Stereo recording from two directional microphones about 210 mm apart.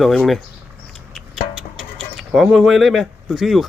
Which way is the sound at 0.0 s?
Centre (ahead or behind).